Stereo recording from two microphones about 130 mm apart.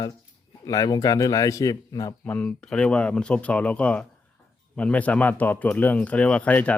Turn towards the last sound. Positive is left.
turn(degrees=10)  # may be behind; listen again after turning